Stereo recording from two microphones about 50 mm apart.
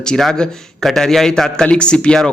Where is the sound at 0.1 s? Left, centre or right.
Centre.